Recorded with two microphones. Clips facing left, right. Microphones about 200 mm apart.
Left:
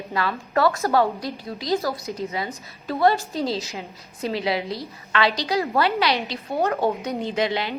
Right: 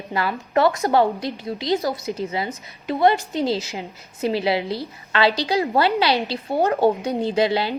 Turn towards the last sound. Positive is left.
turn(degrees=-30)  # may be behind; listen again after turning